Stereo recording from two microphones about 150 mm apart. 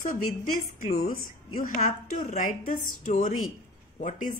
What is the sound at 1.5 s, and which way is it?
A woman's voice, 65° left (ahead or behind).